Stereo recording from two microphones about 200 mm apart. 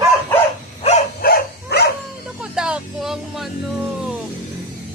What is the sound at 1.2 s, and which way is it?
Dog, 55° left (ahead or behind).